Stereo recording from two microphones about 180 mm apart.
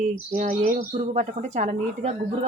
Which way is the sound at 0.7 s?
40° right (ahead or behind).